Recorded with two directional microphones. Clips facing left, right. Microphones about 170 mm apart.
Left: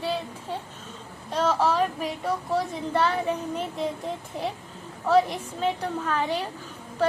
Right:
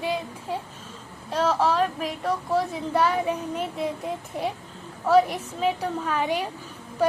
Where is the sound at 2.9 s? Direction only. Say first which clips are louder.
Right 2 dB; 10° right (ahead or behind).